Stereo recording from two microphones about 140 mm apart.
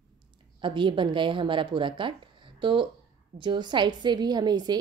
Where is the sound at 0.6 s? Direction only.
35° right (ahead or behind).